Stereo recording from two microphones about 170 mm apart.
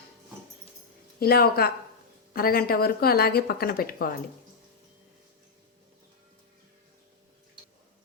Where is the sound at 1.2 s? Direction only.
65° left (ahead or behind).